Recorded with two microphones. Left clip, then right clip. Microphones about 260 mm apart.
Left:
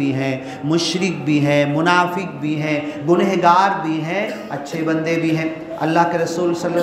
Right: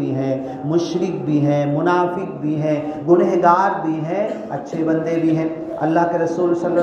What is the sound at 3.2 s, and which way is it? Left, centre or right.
Speech, left.